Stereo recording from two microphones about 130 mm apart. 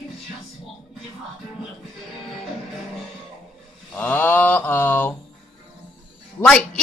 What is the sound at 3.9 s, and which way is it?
Mantra, 15° left (ahead or behind).